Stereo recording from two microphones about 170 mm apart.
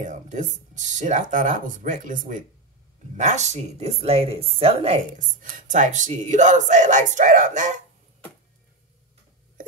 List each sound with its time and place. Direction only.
0.0 s a woman's voice: 45° right (ahead or behind)
5.2 s speech: 50° right (ahead or behind)